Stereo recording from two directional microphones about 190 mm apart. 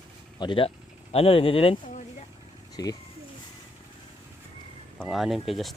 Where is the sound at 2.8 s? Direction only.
20° left (ahead or behind).